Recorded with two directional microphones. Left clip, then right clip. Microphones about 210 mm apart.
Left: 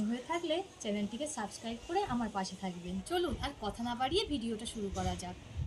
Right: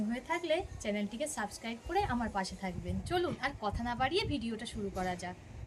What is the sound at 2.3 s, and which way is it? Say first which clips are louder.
Speech: right 2 dB; 20° right (ahead or behind).